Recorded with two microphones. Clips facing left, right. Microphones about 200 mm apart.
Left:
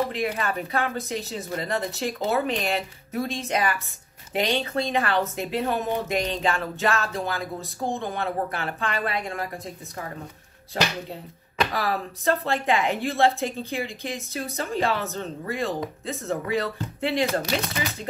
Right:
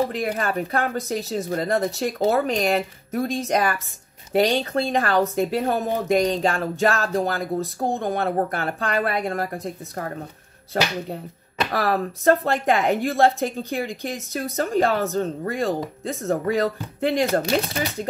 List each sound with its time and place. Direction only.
0.1 s a woman's voice: 40° right (ahead or behind)
11.7 s a woman's voice: 55° right (ahead or behind); by 17.8 s 40° right (ahead or behind)